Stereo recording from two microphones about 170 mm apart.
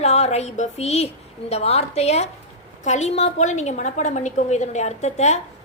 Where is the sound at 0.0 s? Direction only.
40° left (ahead or behind).